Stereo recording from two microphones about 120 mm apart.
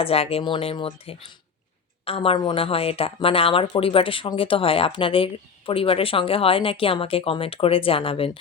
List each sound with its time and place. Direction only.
0.0 s a woman's voice: 55° left (ahead or behind)